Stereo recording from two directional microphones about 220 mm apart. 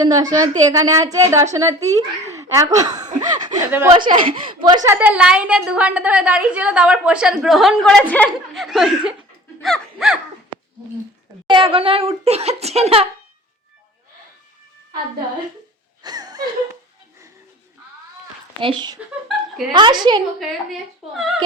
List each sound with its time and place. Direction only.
0.0 s a woman's voice: 15° right (ahead or behind)
4.9 s a woman's voice: 5° right (ahead or behind)
9.6 s gasp: centre (ahead or behind)
11.4 s speech: 25° right (ahead or behind)
16.0 s a sound: 15° right (ahead or behind)
18.6 s speech: 20° right (ahead or behind)
19.3 s a sound: centre (ahead or behind)
19.7 s speech: 20° right (ahead or behind)
20.7 s a woman's voice: centre (ahead or behind)